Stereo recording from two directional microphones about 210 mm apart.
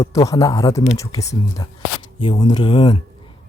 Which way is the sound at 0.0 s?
15° left (ahead or behind).